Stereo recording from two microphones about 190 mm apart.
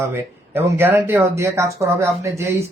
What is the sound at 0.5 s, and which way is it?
Speech, 10° right (ahead or behind).